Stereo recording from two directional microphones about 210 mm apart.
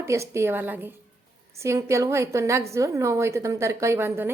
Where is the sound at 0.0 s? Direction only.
15° right (ahead or behind).